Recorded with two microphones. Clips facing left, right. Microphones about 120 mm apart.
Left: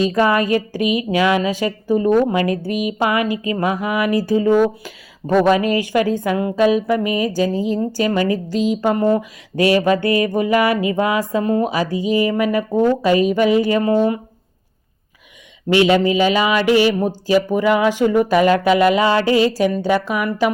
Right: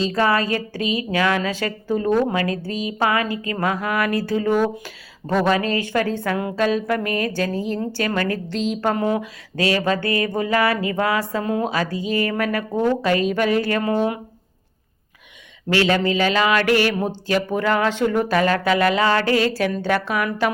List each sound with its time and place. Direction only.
0.1 s a woman's voice: 20° left (ahead or behind)
9.6 s a woman's voice: 15° left (ahead or behind); by 14.2 s centre (ahead or behind)
15.7 s a woman's voice: 15° left (ahead or behind)